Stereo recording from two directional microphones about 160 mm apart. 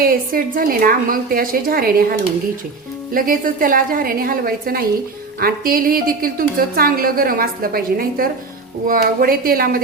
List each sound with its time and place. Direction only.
0.0 s a woman's voice: 65° right (ahead or behind)